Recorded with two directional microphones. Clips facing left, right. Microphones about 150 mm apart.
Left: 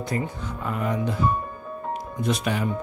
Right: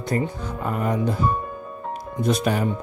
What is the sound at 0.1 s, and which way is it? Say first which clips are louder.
Speech: right 6 dB; 45° right (ahead or behind).